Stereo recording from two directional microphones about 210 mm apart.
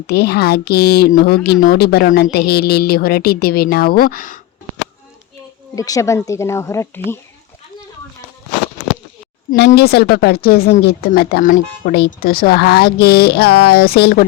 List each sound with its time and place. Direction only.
0.1 s speech: 50° left (ahead or behind)
5.7 s speech: 15° left (ahead or behind)
9.5 s speech: 50° left (ahead or behind)